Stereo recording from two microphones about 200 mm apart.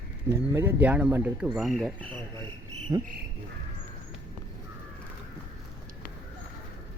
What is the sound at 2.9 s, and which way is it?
Speech, 20° right (ahead or behind).